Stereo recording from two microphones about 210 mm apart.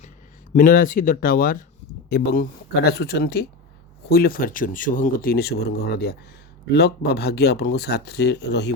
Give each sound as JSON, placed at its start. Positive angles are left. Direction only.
{"t": 0.5, "sound": "speech", "side_deg": 40}